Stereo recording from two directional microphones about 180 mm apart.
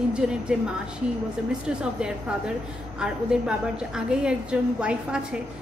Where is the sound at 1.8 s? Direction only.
5° right (ahead or behind).